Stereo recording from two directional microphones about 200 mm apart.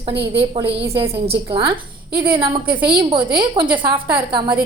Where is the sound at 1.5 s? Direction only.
25° right (ahead or behind).